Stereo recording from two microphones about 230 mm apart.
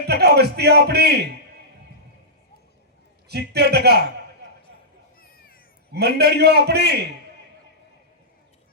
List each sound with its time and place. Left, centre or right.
0.1 s a man's voice: right
3.2 s a man's voice: right
5.2 s a sound: left
5.9 s a man's voice: right